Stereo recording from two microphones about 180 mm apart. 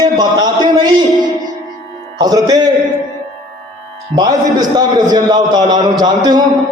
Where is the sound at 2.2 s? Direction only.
20° right (ahead or behind).